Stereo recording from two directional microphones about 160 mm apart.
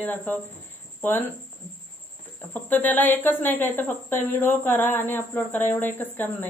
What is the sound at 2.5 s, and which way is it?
Speech, 10° left (ahead or behind).